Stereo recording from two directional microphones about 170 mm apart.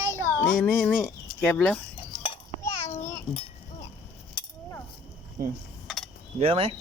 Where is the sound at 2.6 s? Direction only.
15° left (ahead or behind).